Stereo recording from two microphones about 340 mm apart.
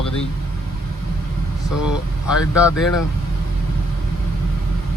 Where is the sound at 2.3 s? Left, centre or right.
Centre.